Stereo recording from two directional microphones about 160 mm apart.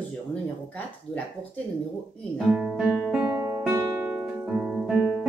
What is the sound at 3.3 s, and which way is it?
Music, 20° right (ahead or behind).